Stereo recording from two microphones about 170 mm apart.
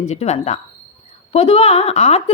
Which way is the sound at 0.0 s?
40° left (ahead or behind).